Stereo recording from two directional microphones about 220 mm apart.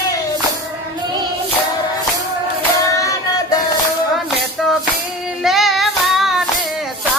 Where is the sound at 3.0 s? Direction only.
15° left (ahead or behind).